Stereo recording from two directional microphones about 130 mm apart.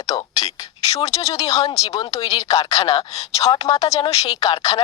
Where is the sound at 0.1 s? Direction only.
35° left (ahead or behind).